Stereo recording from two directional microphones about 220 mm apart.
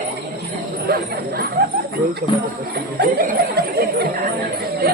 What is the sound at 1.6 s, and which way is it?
Snake, 45° right (ahead or behind).